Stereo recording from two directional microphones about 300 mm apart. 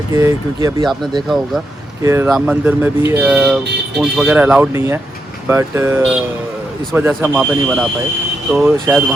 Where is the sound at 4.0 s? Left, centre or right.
Centre.